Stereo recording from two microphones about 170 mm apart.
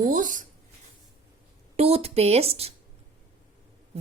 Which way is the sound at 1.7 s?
35° right (ahead or behind).